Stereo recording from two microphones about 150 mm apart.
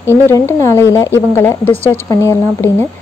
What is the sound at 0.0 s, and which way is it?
Speech, 15° left (ahead or behind).